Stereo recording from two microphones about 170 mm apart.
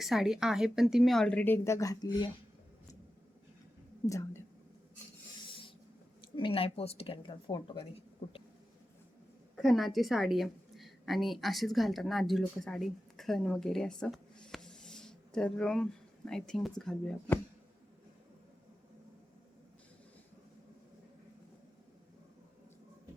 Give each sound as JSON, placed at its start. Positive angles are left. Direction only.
{"t": 0.0, "sound": "speech", "side_deg": 0}
{"t": 4.0, "sound": "a woman's voice", "side_deg": 20}
{"t": 5.5, "sound": "rub", "side_deg": 30}
{"t": 6.3, "sound": "a woman's voice", "side_deg": 30}
{"t": 9.6, "sound": "a woman's voice", "side_deg": 0}